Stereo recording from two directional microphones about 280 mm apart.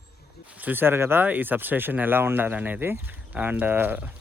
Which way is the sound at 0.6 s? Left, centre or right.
Centre.